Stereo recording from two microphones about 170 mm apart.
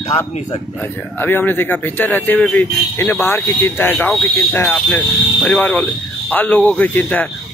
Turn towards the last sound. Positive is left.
turn(degrees=10)  # may be behind; listen again after turning